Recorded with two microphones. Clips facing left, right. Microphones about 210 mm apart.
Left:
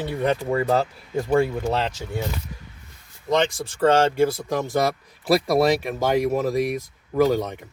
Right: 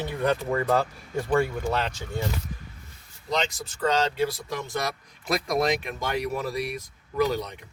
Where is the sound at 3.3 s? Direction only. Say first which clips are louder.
Left 7 dB; 55° left (ahead or behind).